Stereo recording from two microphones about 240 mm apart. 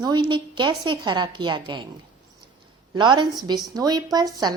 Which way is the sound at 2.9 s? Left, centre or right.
Centre.